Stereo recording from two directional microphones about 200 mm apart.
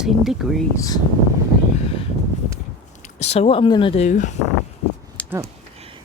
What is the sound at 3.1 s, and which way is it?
Speech, 35° left (ahead or behind).